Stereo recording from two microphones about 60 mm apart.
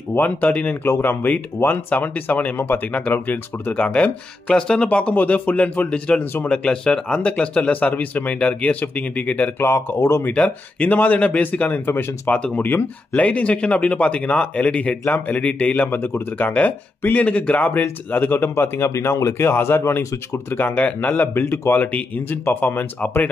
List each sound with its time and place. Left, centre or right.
0.1 s speech: left
0.8 s speech: left
1.6 s speech: left
5.9 s speech: centre
9.6 s speech: left
10.3 s speech: left
12.6 s speech: left
13.3 s speech: left
18.9 s speech: left
20.5 s speech: left